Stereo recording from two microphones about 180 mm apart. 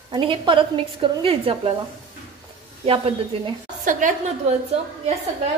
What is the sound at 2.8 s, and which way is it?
Speech, 30° right (ahead or behind).